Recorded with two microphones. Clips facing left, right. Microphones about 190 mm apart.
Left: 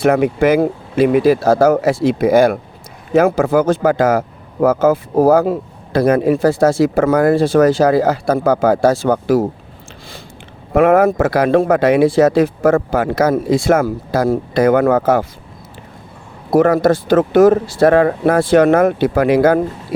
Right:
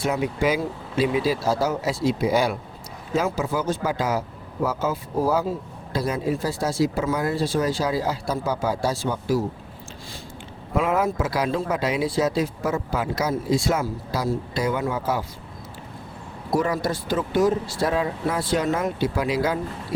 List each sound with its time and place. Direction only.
0.0 s speech: 60° left (ahead or behind)
9.0 s speech: 70° left (ahead or behind)
10.8 s speech: 60° left (ahead or behind); by 15.2 s 75° left (ahead or behind)
16.5 s speech: 60° left (ahead or behind)